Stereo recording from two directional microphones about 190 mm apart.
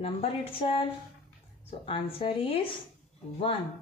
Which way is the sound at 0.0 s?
30° left (ahead or behind).